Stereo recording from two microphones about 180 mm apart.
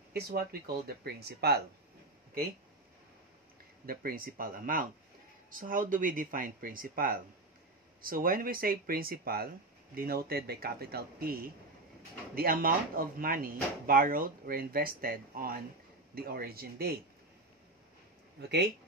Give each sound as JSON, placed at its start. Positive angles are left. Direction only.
{"t": 0.1, "sound": "speech", "side_deg": -60}
{"t": 3.8, "sound": "speech", "side_deg": -55}